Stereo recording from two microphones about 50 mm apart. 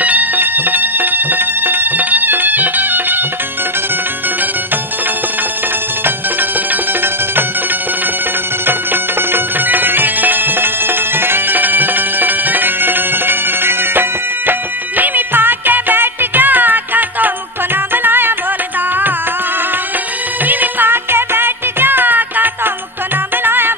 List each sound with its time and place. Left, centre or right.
0.0 s music: right
8.6 s music: right
20.4 s music: right
20.9 s music: right